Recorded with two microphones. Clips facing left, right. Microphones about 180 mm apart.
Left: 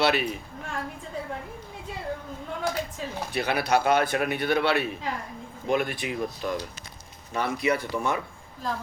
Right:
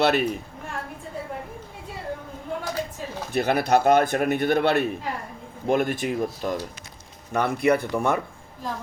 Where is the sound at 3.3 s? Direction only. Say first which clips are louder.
Right 4 dB; 45° right (ahead or behind).